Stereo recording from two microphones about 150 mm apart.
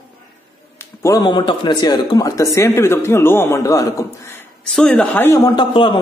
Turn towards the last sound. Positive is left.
turn(degrees=35)  # may be behind; listen again after turning